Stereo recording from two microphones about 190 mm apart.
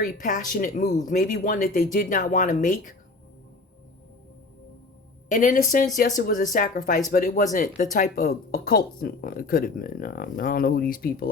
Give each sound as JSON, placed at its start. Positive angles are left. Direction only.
{"t": 0.0, "sound": "speech", "side_deg": 45}
{"t": 5.3, "sound": "speech", "side_deg": 45}